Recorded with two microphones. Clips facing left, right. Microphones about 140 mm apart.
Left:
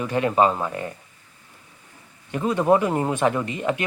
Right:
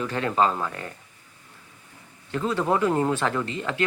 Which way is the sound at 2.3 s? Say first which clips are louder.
Left 5 dB; 15° left (ahead or behind).